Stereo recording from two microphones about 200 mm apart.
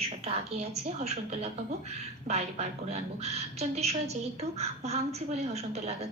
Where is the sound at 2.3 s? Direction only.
35° right (ahead or behind).